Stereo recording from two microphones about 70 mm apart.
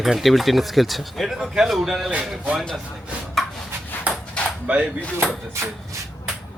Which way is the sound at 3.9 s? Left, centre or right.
Left.